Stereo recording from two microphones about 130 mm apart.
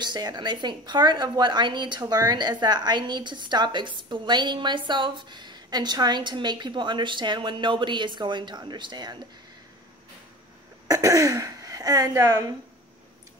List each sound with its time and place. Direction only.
0.0 s a woman's voice: 35° right (ahead or behind)
10.9 s speech: 25° right (ahead or behind)